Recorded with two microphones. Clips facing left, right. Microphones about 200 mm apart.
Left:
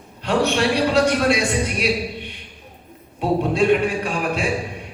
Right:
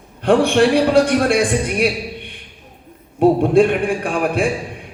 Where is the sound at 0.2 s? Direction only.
55° right (ahead or behind).